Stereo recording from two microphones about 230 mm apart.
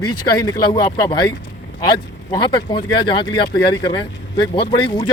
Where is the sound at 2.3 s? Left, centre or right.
Centre.